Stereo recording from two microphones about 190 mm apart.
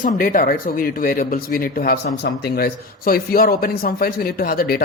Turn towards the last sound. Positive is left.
turn(degrees=50)  # may be behind; listen again after turning